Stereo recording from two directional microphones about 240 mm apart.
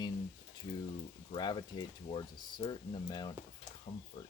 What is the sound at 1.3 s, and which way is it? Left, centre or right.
Speech, centre.